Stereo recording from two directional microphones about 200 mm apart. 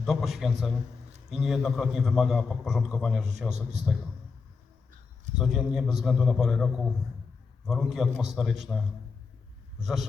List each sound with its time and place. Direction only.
0.0 s a man's voice: centre (ahead or behind)
3.5 s a man's voice: 35° right (ahead or behind)
5.4 s a man's voice: centre (ahead or behind)
7.7 s a man's voice: centre (ahead or behind)
9.8 s a man's voice: centre (ahead or behind)